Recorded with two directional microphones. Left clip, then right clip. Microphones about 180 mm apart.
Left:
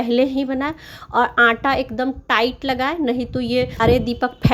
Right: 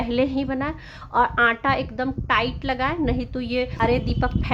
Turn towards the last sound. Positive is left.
turn(degrees=25)  # may be behind; listen again after turning